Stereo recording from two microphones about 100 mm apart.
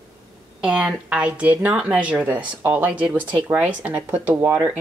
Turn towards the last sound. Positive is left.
turn(degrees=-15)  # may be behind; listen again after turning